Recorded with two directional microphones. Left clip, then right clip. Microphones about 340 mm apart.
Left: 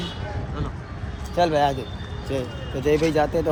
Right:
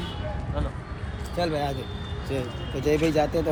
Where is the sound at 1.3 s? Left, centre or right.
Centre.